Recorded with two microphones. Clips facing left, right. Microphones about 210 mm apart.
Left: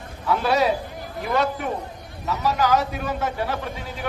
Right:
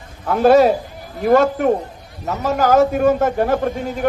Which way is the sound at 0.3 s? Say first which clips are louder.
Right 9 dB; 50° right (ahead or behind).